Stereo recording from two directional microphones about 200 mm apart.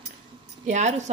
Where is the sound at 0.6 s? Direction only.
35° right (ahead or behind).